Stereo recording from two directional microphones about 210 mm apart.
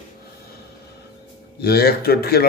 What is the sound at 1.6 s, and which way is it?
Speech, 50° left (ahead or behind).